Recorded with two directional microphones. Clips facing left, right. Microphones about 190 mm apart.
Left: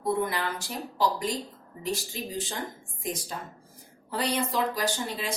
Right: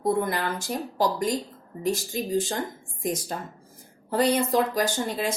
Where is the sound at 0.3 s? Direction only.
45° right (ahead or behind).